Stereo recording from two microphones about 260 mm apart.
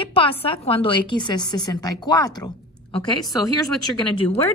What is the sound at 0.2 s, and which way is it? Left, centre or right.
A woman's voice, left.